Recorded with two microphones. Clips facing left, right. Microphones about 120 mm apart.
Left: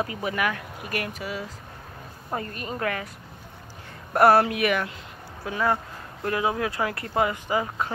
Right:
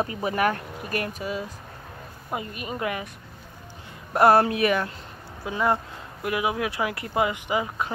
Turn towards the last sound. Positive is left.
turn(degrees=-20)  # may be behind; listen again after turning